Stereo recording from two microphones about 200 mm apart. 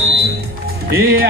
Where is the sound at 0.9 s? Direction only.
50° right (ahead or behind).